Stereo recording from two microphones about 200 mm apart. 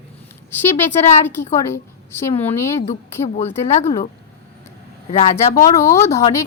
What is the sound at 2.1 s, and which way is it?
Speech, 10° left (ahead or behind).